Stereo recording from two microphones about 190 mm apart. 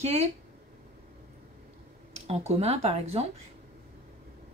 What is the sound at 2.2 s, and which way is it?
Speech, 35° right (ahead or behind).